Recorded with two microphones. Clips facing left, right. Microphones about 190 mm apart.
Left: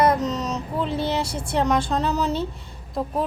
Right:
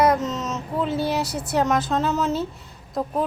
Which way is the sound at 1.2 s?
30° left (ahead or behind).